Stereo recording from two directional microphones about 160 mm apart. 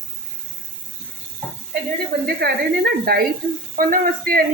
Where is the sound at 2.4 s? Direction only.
80° right.